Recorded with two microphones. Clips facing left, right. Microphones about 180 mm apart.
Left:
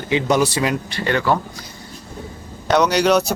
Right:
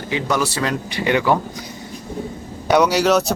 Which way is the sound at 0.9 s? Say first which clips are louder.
Right 2 dB; 15° right (ahead or behind).